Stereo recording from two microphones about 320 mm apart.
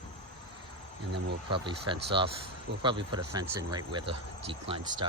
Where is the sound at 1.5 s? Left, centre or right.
Centre.